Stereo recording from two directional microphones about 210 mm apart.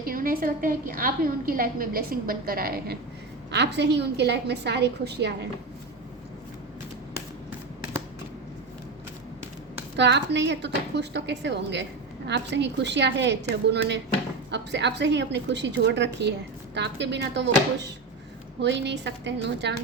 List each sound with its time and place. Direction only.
0.0 s a woman's voice: 45° right (ahead or behind)
10.0 s a woman's voice: 55° right (ahead or behind)
18.6 s a woman's voice: 55° right (ahead or behind)